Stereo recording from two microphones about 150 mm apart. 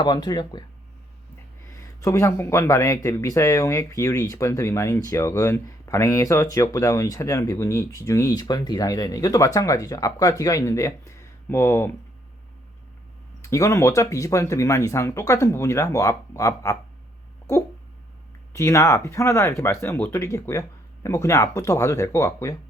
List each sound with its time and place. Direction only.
0.0 s speech: 30° left (ahead or behind)
1.7 s speech: 20° left (ahead or behind)
13.4 s speech: 20° left (ahead or behind)
18.5 s speech: 20° left (ahead or behind)